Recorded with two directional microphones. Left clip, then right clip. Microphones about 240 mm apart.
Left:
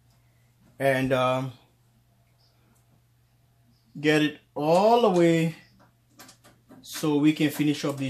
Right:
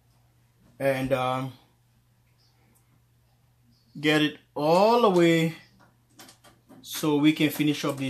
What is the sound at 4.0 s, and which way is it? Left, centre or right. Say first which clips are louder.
Speech: left 1 dB; centre.